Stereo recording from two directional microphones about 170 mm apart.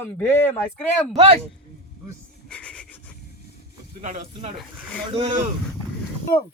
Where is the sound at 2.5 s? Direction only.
5° left (ahead or behind).